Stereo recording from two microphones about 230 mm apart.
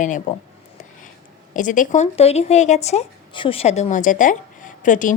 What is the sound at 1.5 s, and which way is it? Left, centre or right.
Speech, left.